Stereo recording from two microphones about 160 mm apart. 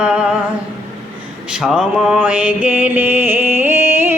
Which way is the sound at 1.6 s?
5° right (ahead or behind).